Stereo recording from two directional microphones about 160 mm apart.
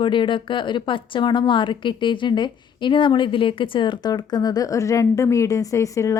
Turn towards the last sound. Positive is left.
turn(degrees=20)  # may be behind; listen again after turning